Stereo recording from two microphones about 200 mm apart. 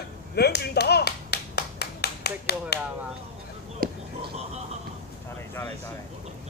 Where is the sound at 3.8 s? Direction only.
45° right (ahead or behind).